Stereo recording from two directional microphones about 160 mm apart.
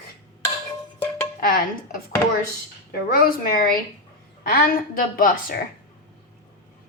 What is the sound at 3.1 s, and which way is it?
A woman's voice, 65° left (ahead or behind).